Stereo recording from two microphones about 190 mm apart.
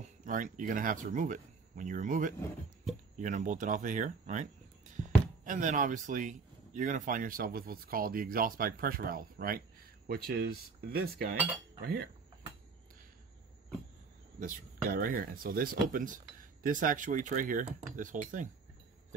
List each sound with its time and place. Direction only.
0.0 s speech: 45° right (ahead or behind)
11.8 s cutlery: 55° right (ahead or behind)
14.4 s speech: 50° right (ahead or behind)